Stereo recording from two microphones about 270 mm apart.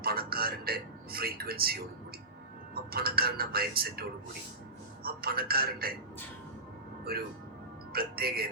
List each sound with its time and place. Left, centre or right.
0.0 s a man's voice: right
5.0 s speech: right
7.1 s speech: right